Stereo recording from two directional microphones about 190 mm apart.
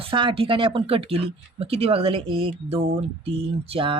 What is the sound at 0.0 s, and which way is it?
Speech, 25° right (ahead or behind).